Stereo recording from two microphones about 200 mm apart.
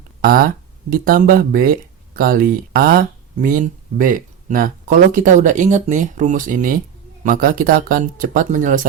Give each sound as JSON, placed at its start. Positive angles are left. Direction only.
{"t": 0.2, "sound": "speech", "side_deg": -50}